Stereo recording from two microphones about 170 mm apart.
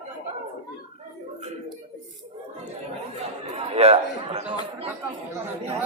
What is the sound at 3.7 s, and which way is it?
Speech, 35° right (ahead or behind).